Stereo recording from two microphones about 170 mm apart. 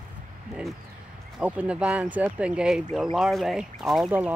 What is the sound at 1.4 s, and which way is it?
Speech, 10° right (ahead or behind).